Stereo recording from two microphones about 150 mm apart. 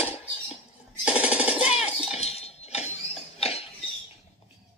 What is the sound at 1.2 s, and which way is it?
Jackhammer, 10° right (ahead or behind).